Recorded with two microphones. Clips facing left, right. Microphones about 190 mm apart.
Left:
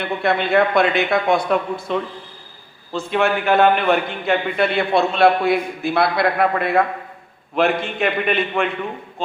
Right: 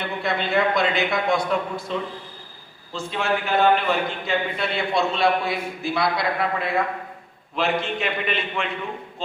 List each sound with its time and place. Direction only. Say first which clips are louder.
0.2 s a man's voice: left 5 dB; 60° left (ahead or behind)